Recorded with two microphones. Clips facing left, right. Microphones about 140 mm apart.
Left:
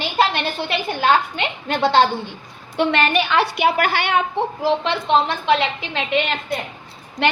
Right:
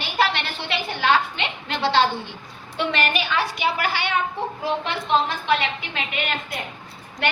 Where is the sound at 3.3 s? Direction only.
65° left (ahead or behind).